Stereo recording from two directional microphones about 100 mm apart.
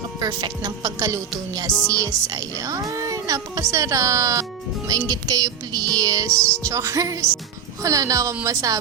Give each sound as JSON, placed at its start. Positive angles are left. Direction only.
{"t": 0.2, "sound": "speech", "side_deg": -40}